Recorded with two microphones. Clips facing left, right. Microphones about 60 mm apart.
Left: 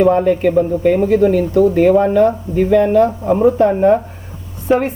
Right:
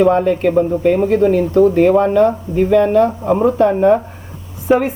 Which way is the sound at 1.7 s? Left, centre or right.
Centre.